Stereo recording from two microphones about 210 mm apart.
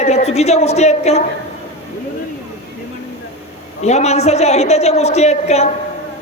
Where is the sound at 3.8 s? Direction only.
30° left (ahead or behind).